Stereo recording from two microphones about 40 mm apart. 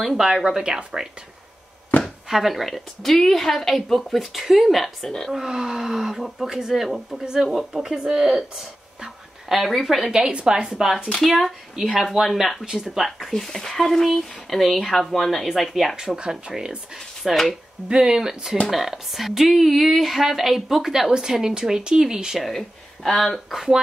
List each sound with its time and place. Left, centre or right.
0.2 s speech: centre
0.7 s speech: right
1.9 s chopping: left
2.2 s a woman's voice: centre
5.3 s speech: centre
7.7 s a woman's voice: centre
10.1 s speech: centre
11.1 s a woman's voice: centre
13.3 s a woman's voice: centre
16.2 s speech: centre
16.9 s speech: centre
17.8 s a woman's voice: centre
22.4 s a woman's voice: centre